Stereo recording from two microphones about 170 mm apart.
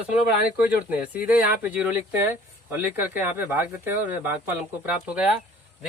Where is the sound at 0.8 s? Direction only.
10° right (ahead or behind).